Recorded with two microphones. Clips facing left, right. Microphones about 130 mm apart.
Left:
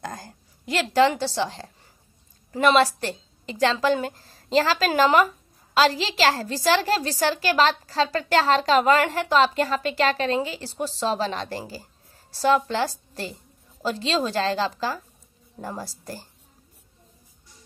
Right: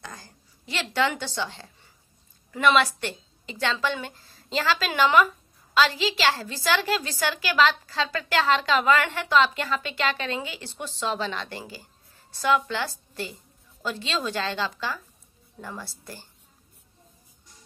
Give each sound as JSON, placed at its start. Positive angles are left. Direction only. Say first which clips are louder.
{"t": 0.0, "sound": "a woman's voice", "louder": "left 8 dB", "side_deg": 45}